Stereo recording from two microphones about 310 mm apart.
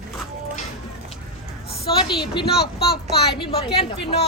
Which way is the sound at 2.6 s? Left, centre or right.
Left.